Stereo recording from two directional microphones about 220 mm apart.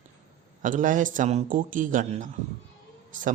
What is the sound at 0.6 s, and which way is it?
Speech, 35° right (ahead or behind).